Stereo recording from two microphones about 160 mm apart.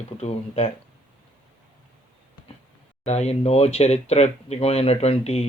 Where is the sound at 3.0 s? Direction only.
45° left (ahead or behind).